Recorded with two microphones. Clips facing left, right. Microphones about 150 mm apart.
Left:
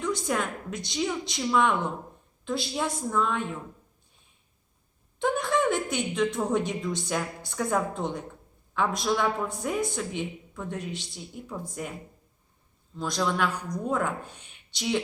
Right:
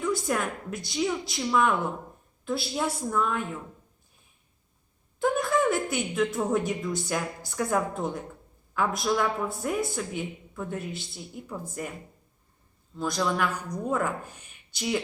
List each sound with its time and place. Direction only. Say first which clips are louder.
0.0 s a woman's voice: right 1 dB; 5° right (ahead or behind)
5.2 s a woman's voice: right 1 dB; 5° right (ahead or behind)
13.0 s a woman's voice: even; 5° right (ahead or behind)